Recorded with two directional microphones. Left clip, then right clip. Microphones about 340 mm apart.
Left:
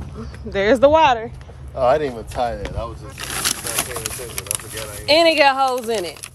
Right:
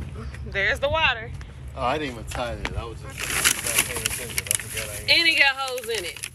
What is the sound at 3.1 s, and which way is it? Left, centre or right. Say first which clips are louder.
Speech: right 1 dB; centre.